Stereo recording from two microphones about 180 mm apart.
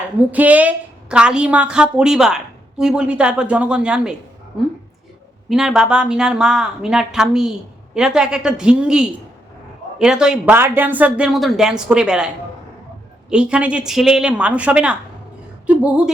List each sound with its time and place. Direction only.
0.2 s a woman's voice: 10° right (ahead or behind)
5.5 s a woman's voice: centre (ahead or behind)
13.3 s a woman's voice: 5° right (ahead or behind)
15.6 s a sound: 5° right (ahead or behind)